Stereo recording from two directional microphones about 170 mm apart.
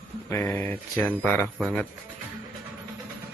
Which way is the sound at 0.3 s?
10° left (ahead or behind).